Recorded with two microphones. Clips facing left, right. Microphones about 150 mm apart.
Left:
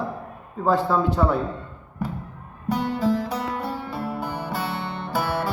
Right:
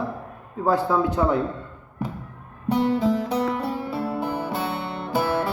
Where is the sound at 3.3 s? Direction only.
30° right (ahead or behind).